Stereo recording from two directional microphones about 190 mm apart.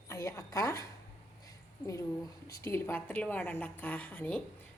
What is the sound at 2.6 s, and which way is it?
A woman's voice, 10° left (ahead or behind).